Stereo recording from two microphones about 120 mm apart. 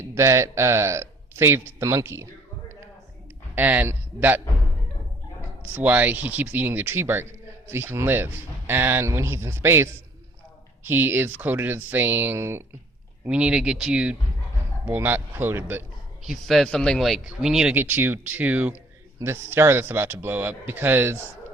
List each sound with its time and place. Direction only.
0.1 s a man's voice: 25° right (ahead or behind)
3.5 s a man's voice: 15° right (ahead or behind)
5.7 s speech: 15° right (ahead or behind)
13.2 s speech: 10° right (ahead or behind)
16.2 s speech: centre (ahead or behind)
17.7 s speech: 15° right (ahead or behind)